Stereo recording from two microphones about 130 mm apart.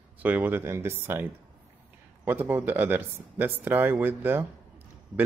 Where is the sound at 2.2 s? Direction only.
15° right (ahead or behind).